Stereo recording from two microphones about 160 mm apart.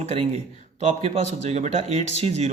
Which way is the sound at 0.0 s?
45° right (ahead or behind).